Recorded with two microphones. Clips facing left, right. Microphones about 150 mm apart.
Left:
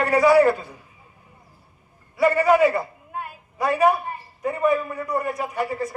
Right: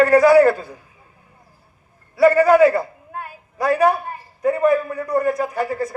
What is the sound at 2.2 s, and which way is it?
Speech, 40° right (ahead or behind).